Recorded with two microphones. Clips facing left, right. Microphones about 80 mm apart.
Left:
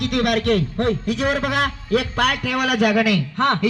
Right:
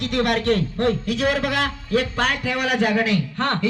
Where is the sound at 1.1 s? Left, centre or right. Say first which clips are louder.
Left 1 dB; left.